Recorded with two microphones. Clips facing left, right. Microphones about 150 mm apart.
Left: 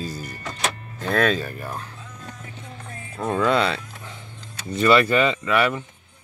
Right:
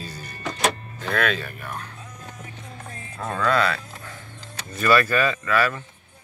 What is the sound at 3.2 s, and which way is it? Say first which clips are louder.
Speech: left 2 dB; 20° left (ahead or behind).